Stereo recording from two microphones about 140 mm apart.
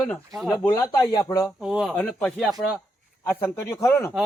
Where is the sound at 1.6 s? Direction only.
5° right (ahead or behind).